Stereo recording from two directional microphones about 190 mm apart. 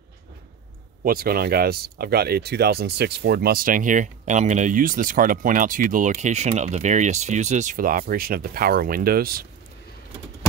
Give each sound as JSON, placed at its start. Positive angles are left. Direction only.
{"t": 1.0, "sound": "speech", "side_deg": -50}